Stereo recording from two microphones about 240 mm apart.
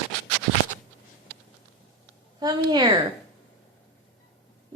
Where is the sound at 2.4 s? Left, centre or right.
Centre.